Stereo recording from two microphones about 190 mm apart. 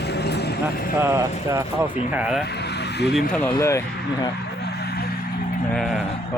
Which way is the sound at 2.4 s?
60° left (ahead or behind).